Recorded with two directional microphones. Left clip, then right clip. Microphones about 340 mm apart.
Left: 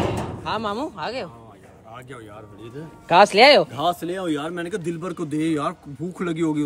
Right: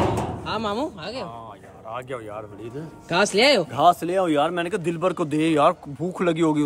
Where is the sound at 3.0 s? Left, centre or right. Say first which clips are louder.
Left 7 dB; left.